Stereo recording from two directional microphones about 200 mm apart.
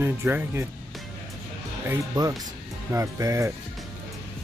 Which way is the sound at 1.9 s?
15° right (ahead or behind).